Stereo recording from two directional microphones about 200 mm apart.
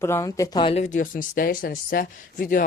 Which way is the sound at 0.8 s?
40° left (ahead or behind).